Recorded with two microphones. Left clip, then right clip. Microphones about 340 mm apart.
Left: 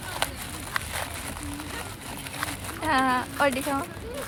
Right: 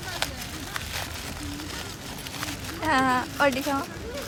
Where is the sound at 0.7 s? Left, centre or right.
Centre.